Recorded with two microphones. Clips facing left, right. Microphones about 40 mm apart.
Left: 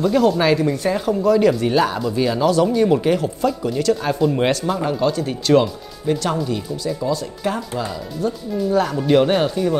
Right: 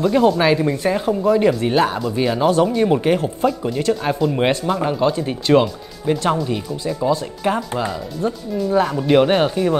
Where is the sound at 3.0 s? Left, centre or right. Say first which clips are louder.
Right 1 dB; right.